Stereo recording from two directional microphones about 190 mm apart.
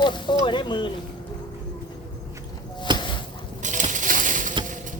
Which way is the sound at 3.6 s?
40° right (ahead or behind).